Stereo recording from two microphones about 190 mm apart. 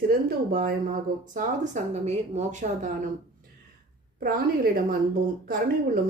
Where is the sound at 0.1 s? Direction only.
50° right (ahead or behind).